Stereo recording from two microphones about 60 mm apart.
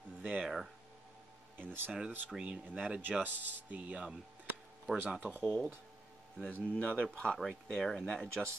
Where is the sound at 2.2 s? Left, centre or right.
Centre.